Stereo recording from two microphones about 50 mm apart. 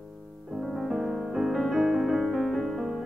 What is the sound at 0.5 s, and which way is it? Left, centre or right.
Music, centre.